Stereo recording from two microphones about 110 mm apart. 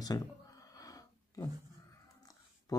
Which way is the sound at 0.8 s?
35° left (ahead or behind).